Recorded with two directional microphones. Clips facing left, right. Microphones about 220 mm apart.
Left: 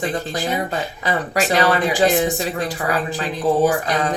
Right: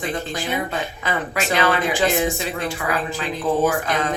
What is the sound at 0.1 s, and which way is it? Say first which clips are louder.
Speech: left 2 dB; 35° left (ahead or behind).